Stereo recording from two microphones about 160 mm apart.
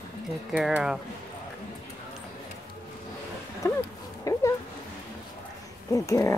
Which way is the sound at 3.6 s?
15° left (ahead or behind).